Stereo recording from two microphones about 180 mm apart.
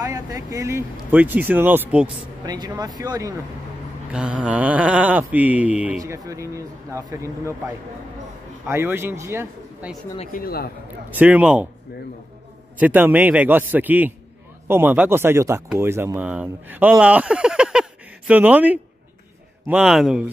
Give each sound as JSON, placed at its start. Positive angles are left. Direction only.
{"t": 0.0, "sound": "speech", "side_deg": -20}
{"t": 2.4, "sound": "speech", "side_deg": -20}
{"t": 4.1, "sound": "speech", "side_deg": -5}
{"t": 6.1, "sound": "speech", "side_deg": -20}
{"t": 8.6, "sound": "speech", "side_deg": -15}
{"t": 10.3, "sound": "speech", "side_deg": 55}
{"t": 11.1, "sound": "speech", "side_deg": -10}
{"t": 12.7, "sound": "a man's voice", "side_deg": -10}